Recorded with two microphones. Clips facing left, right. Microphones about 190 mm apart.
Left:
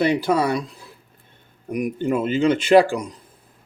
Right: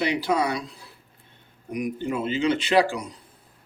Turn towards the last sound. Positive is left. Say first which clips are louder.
# left 6 dB
turn(degrees=50)  # may be behind; listen again after turning